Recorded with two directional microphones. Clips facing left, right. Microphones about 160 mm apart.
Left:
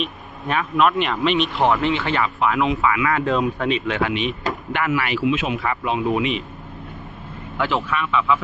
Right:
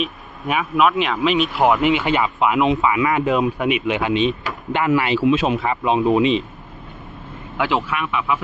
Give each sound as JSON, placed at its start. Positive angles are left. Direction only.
{"t": 0.0, "sound": "speech", "side_deg": -10}
{"t": 5.2, "sound": "speech", "side_deg": -35}
{"t": 5.6, "sound": "speech", "side_deg": -20}
{"t": 7.6, "sound": "speech", "side_deg": -15}